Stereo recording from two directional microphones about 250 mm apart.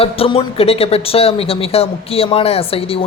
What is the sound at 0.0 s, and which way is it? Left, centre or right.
Speech, left.